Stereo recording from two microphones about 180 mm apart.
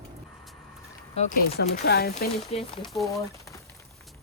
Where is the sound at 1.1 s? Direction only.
45° left (ahead or behind).